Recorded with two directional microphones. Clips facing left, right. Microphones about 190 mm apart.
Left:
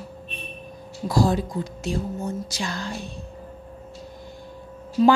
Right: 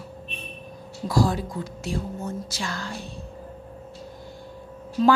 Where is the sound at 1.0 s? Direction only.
25° left (ahead or behind).